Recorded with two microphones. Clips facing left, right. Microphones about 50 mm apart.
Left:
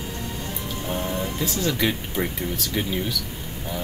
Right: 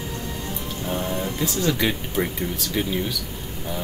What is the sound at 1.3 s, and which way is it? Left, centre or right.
Speech, centre.